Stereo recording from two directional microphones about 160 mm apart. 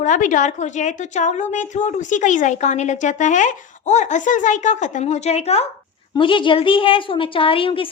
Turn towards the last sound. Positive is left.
turn(degrees=35)  # may be behind; listen again after turning